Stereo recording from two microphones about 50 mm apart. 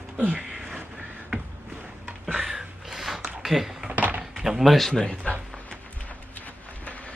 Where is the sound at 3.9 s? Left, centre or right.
Right.